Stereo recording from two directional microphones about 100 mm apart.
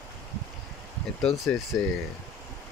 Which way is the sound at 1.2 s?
Centre (ahead or behind).